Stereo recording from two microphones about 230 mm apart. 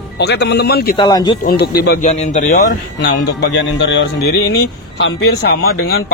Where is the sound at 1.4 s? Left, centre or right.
Left.